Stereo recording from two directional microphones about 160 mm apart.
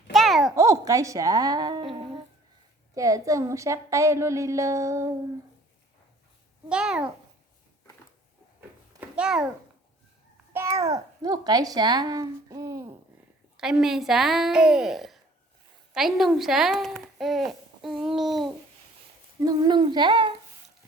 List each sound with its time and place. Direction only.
0.1 s a sound: centre (ahead or behind)
0.5 s speech: 20° right (ahead or behind)
2.9 s a child's voice: 20° right (ahead or behind)
6.7 s a woman's voice: 5° right (ahead or behind)
9.0 s a sound: 5° right (ahead or behind)
10.5 s a child's voice: 15° right (ahead or behind)
13.6 s a woman's voice: 5° right (ahead or behind)
19.4 s a child's voice: 25° right (ahead or behind)